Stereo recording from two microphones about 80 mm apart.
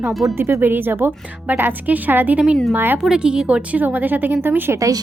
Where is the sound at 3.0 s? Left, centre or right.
Centre; by 4.7 s right.